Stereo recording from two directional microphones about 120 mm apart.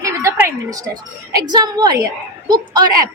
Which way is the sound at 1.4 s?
35° right (ahead or behind).